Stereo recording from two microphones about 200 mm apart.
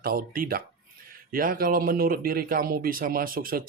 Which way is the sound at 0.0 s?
45° right (ahead or behind).